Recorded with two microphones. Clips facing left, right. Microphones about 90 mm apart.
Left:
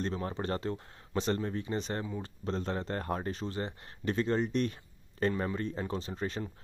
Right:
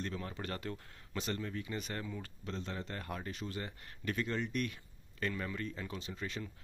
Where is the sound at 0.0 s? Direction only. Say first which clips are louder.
Left 7 dB; 35° left (ahead or behind).